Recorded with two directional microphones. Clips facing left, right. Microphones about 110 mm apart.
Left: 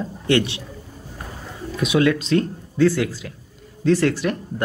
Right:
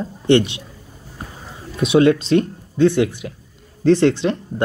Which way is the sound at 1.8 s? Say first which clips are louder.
Right 5 dB; 30° right (ahead or behind).